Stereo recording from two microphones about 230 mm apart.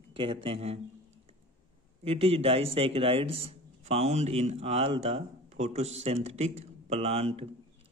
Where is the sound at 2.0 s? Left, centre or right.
Right.